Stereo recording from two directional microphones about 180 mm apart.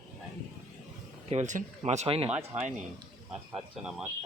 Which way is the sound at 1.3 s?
40° right (ahead or behind).